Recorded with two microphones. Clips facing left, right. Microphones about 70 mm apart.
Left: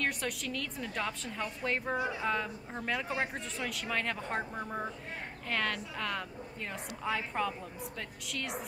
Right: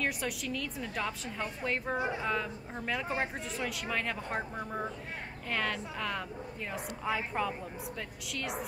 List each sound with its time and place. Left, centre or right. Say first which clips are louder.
0.0 s a woman's voice: even; centre
2.0 s speech: right 1 dB; right
2.2 s a woman's voice: even; centre